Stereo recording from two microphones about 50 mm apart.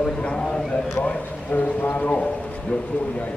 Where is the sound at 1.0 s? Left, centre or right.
Left.